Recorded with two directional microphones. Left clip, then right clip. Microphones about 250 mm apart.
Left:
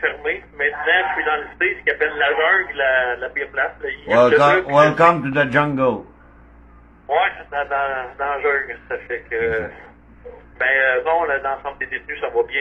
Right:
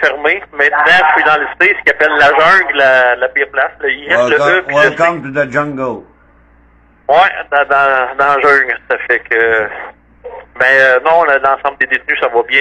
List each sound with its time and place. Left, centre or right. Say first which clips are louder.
0.0 s speech: right 10 dB; right
4.6 s a man's voice: right 3 dB; centre
7.1 s speech: right 10 dB; right